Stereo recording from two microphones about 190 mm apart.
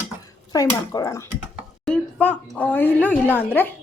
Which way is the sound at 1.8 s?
5° left (ahead or behind).